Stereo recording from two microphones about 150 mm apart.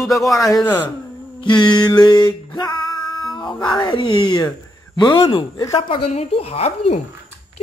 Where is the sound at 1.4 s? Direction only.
30° left (ahead or behind).